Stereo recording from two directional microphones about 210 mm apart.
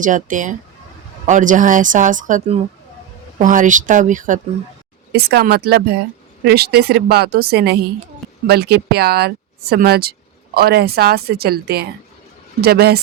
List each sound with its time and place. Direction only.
0.0 s speech: 40° right (ahead or behind)
5.1 s speech: 50° right (ahead or behind)